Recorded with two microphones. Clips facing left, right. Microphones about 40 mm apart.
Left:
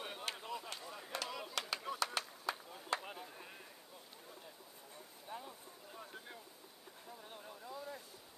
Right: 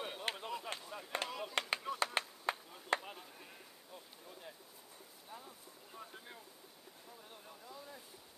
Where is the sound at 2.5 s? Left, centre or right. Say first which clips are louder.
Right 3 dB; right.